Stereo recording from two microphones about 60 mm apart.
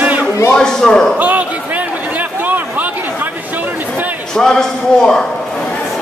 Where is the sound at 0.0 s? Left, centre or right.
Right.